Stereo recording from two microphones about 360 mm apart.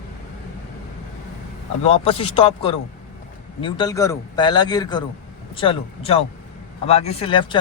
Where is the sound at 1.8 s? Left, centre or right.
Centre.